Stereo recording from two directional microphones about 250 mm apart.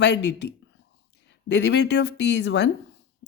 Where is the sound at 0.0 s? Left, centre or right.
Left.